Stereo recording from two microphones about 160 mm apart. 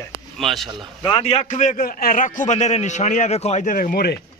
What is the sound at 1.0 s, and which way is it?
A man's voice, 40° left (ahead or behind).